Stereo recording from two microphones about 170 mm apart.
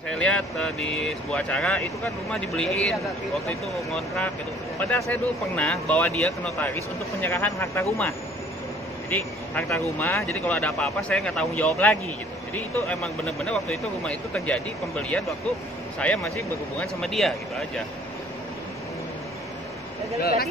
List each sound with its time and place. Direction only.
0.1 s speech: 5° left (ahead or behind)
9.1 s speech: 10° left (ahead or behind)
16.8 s speech: centre (ahead or behind)
20.2 s speech: 65° left (ahead or behind)